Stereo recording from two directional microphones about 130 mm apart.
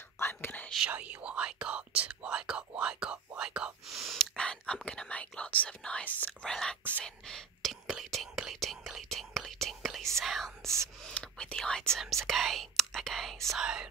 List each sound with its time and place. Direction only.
0.2 s whispering: 15° left (ahead or behind)
0.7 s speech: 10° right (ahead or behind); by 6.8 s 5° left (ahead or behind)
7.2 s whispering: 5° left (ahead or behind)
10.6 s speech: 20° right (ahead or behind)
11.1 s speech: 5° left (ahead or behind)